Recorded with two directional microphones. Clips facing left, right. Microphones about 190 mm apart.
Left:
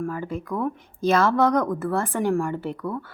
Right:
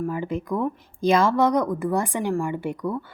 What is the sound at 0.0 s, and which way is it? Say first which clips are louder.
A woman's voice: right 2 dB; 15° right (ahead or behind).